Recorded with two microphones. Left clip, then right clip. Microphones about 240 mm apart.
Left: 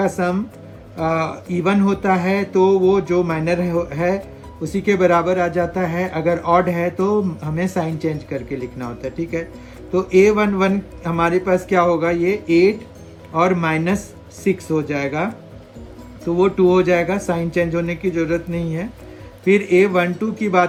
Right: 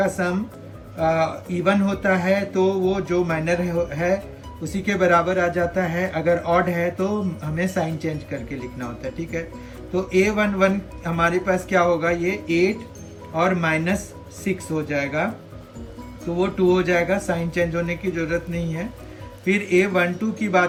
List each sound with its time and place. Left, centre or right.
0.0 s speech: centre
16.6 s speech: left